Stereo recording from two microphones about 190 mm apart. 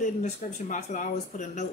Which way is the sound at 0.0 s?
40° left (ahead or behind).